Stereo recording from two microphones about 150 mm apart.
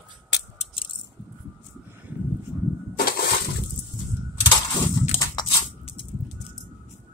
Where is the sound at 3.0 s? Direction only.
85° left.